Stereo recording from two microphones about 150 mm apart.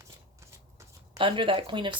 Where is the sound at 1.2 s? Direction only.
35° right (ahead or behind).